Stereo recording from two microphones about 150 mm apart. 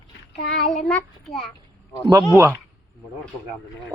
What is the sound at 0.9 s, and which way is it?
Speech, centre (ahead or behind).